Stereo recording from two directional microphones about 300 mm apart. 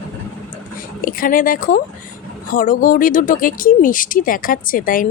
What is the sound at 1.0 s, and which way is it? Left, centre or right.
Speech, left.